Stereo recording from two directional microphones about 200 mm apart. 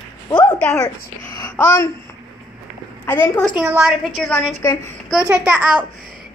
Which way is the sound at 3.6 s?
5° right (ahead or behind).